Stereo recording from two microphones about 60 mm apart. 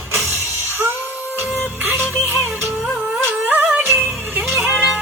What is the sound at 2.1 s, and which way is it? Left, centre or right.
Music, left.